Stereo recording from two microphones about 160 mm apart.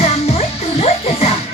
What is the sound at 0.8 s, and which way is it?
Music, 40° left (ahead or behind).